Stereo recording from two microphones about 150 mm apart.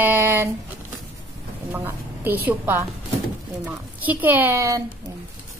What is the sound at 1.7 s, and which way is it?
A woman's voice, 15° right (ahead or behind).